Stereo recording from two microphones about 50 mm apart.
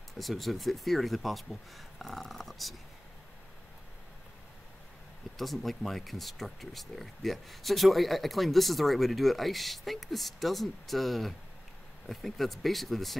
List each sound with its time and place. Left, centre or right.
0.2 s speech: centre
5.4 s speech: centre